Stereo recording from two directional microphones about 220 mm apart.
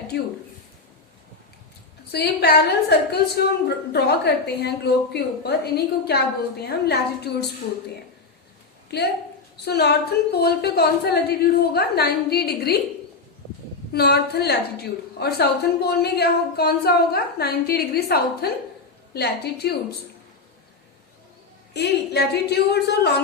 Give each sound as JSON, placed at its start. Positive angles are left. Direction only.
{"t": 0.1, "sound": "a woman's voice", "side_deg": 50}
{"t": 2.1, "sound": "a woman's voice", "side_deg": 45}
{"t": 9.6, "sound": "a woman's voice", "side_deg": 45}
{"t": 13.9, "sound": "a woman's voice", "side_deg": 45}
{"t": 21.7, "sound": "a woman's voice", "side_deg": 50}